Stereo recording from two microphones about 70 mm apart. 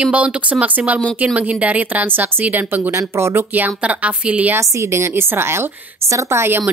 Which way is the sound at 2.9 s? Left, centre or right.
Right.